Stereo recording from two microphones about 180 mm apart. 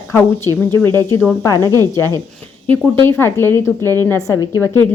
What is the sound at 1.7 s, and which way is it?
Speech, 20° right (ahead or behind).